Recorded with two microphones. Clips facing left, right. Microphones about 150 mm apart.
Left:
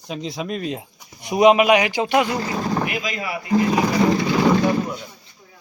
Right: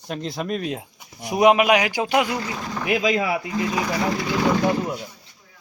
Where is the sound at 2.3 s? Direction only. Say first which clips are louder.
Left 5 dB; 40° left (ahead or behind).